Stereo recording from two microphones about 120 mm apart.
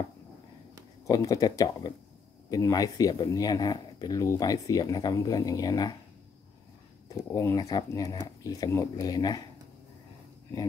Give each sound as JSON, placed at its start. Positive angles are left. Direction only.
{"t": 1.0, "sound": "speech", "side_deg": 30}
{"t": 7.2, "sound": "speech", "side_deg": 20}